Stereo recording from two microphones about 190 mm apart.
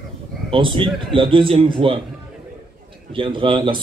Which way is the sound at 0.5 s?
25° right (ahead or behind).